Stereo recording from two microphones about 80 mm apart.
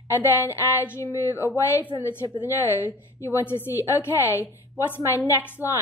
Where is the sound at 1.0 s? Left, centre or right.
Left.